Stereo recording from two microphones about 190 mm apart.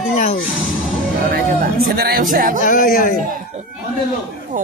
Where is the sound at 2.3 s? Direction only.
45° right (ahead or behind).